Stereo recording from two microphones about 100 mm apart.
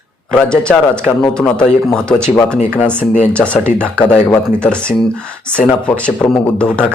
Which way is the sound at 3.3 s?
10° left (ahead or behind).